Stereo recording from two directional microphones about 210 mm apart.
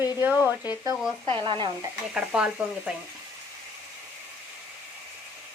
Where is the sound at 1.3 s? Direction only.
25° right (ahead or behind).